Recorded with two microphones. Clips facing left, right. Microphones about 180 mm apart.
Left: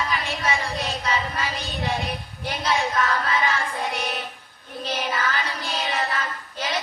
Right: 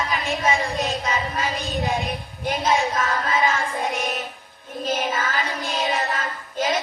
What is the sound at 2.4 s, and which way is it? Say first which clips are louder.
Child singing: right 3 dB; 45° right (ahead or behind).